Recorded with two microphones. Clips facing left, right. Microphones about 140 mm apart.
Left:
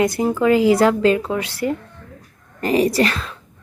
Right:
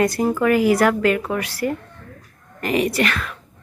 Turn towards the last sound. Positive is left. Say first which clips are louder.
# left 3 dB
turn(degrees=30)  # may be behind; listen again after turning